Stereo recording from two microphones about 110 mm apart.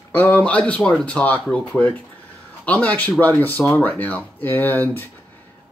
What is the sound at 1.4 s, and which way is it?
Speech, 5° left (ahead or behind).